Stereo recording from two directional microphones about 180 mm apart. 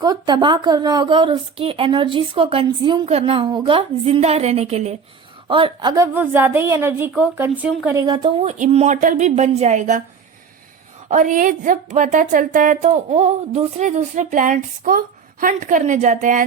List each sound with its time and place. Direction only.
0.0 s a woman's voice: 20° right (ahead or behind)
8.0 s speech: 25° right (ahead or behind); by 10.0 s 40° right (ahead or behind)
11.1 s a woman's voice: 45° right (ahead or behind)